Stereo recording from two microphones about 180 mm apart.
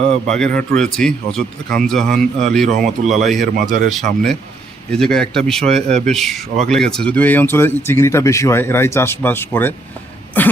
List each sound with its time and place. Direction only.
0.1 s speech: 5° left (ahead or behind)
3.4 s speech: 45° right (ahead or behind)
4.9 s speech: 5° left (ahead or behind)
5.6 s a man's voice: 35° right (ahead or behind)
6.1 s speech: centre (ahead or behind)